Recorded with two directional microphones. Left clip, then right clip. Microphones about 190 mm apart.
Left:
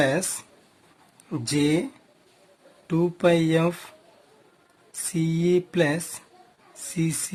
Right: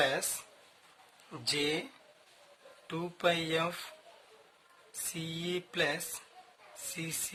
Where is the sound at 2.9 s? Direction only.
25° left (ahead or behind).